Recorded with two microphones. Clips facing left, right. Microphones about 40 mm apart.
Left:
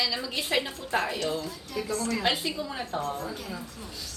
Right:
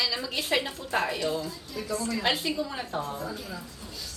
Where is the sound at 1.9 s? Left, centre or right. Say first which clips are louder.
Even; left.